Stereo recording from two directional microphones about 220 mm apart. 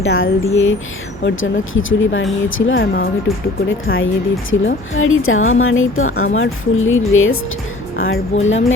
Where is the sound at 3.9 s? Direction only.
60° left (ahead or behind).